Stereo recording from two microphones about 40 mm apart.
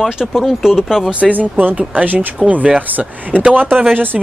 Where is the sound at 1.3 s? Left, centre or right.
Right.